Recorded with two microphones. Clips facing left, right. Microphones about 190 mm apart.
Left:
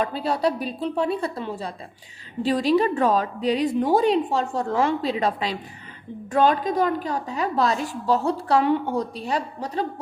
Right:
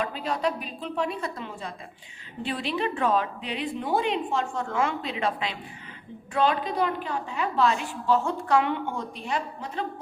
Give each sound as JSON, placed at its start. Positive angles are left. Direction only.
{"t": 0.0, "sound": "a woman's voice", "side_deg": 35}